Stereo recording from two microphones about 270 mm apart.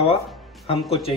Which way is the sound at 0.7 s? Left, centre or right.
Centre.